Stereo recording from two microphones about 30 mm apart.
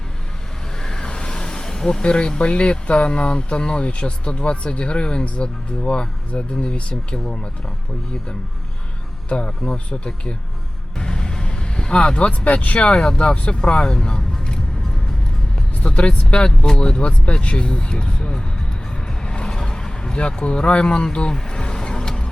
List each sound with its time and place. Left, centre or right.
0.8 s vehicle: left
2.0 s speech: left
9.3 s speech: left
10.9 s vehicle: left
12.6 s speech: left
12.9 s speech: left
15.9 s speech: left
19.2 s vehicle: left
20.1 s speech: left